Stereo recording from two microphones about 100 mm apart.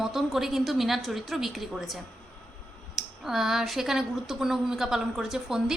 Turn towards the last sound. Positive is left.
turn(degrees=-5)  # may be behind; listen again after turning